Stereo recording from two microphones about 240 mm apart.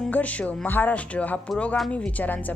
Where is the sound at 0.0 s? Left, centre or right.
Centre.